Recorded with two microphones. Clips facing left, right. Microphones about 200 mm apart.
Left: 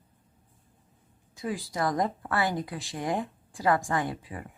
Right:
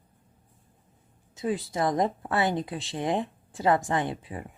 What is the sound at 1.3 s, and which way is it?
Speech, 25° right (ahead or behind).